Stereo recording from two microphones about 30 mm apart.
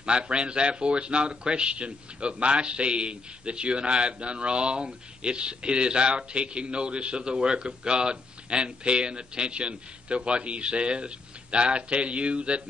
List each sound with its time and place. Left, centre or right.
0.0 s speech: right